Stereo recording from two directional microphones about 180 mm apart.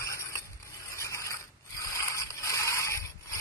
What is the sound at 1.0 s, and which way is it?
Mechanisms, 15° left (ahead or behind).